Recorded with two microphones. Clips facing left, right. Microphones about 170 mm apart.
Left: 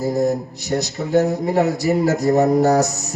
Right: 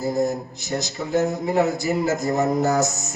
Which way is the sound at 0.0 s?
35° left (ahead or behind).